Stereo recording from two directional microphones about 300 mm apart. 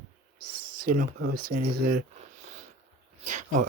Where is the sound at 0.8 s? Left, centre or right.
Right.